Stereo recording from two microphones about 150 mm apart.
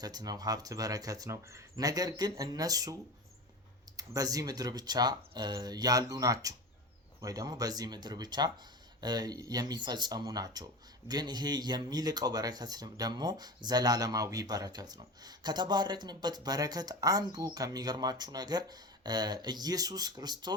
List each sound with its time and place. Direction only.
0.0 s speech: 25° right (ahead or behind)